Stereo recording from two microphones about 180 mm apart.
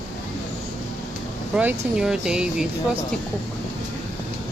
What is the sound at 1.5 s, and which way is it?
Speech, 5° right (ahead or behind).